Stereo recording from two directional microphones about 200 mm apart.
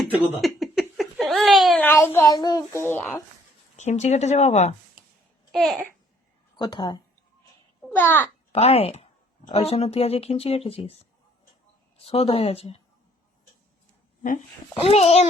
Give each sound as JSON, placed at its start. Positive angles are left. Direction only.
{"t": 0.1, "sound": "a sound", "side_deg": 0}
{"t": 1.9, "sound": "a child's voice", "side_deg": 10}
{"t": 3.8, "sound": "speech", "side_deg": 35}
{"t": 5.5, "sound": "a child's voice", "side_deg": 0}
{"t": 6.6, "sound": "speech", "side_deg": 20}
{"t": 7.9, "sound": "a child's voice", "side_deg": 10}
{"t": 8.5, "sound": "speech", "side_deg": 30}
{"t": 12.0, "sound": "speech", "side_deg": 30}
{"t": 14.8, "sound": "speech", "side_deg": 30}